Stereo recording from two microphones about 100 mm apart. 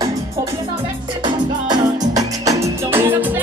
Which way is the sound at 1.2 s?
45° right (ahead or behind).